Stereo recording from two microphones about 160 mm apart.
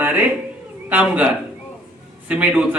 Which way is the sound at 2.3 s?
10° right (ahead or behind).